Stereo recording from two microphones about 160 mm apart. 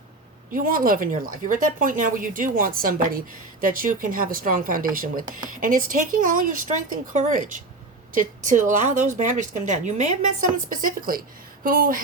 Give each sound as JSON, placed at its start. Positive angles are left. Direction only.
{"t": 0.5, "sound": "a woman's voice", "side_deg": -60}
{"t": 10.7, "sound": "a woman's voice", "side_deg": -60}